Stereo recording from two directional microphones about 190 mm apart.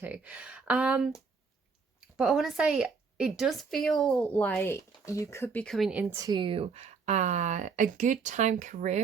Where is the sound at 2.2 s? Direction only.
Centre (ahead or behind).